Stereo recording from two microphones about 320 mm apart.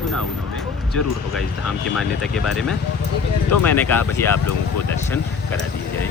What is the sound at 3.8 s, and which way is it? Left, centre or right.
Speech, centre.